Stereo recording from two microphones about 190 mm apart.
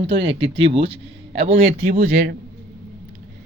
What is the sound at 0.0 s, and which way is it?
Speech, 30° right (ahead or behind).